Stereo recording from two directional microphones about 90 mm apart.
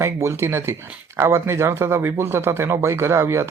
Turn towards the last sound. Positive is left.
turn(degrees=-30)  # may be behind; listen again after turning